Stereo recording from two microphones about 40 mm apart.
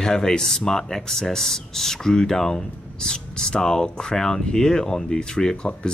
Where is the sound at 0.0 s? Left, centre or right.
Centre.